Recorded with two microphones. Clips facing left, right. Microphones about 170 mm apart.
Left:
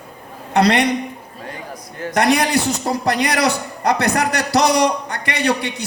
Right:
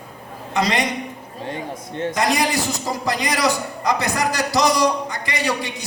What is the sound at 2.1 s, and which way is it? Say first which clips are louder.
A man's voice: left 5 dB; 65° left (ahead or behind).